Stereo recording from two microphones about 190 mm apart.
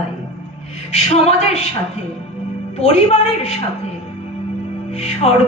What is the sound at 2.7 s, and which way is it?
Speech, 35° left (ahead or behind).